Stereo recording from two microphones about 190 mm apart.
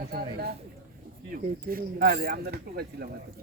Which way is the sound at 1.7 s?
50° right (ahead or behind).